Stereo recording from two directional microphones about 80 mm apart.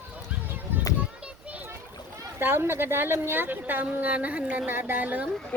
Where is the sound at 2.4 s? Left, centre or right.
Right.